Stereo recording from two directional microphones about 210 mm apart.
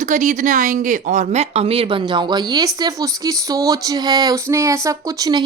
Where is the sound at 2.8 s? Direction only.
15° right (ahead or behind).